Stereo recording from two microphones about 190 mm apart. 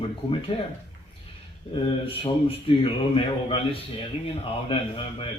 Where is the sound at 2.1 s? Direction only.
30° left (ahead or behind).